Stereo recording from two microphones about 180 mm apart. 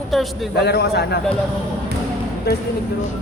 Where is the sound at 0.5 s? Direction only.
65° left (ahead or behind).